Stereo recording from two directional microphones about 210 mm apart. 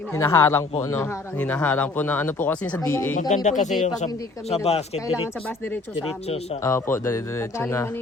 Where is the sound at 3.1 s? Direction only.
35° left (ahead or behind).